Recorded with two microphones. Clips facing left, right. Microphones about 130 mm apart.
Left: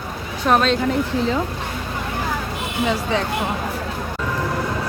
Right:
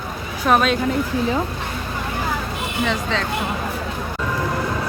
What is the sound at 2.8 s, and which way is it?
Speech, 10° left (ahead or behind).